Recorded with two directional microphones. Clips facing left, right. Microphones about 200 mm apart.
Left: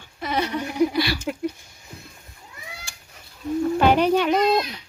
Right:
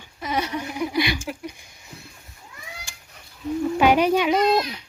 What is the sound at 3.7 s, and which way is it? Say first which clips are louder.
Speech: right 1 dB; 10° right (ahead or behind).